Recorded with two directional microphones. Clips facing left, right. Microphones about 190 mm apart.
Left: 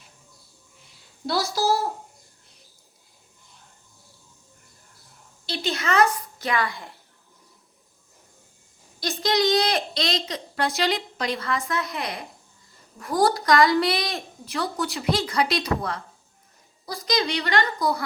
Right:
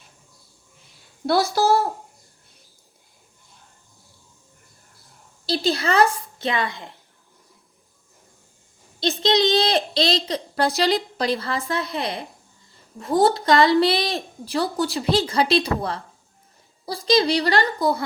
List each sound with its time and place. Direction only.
1.3 s speech: 55° right (ahead or behind)
5.5 s a woman's voice: 35° right (ahead or behind)
9.0 s a woman's voice: 25° right (ahead or behind)